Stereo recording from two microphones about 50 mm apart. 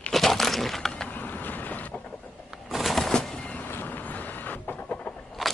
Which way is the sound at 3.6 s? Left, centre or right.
Left.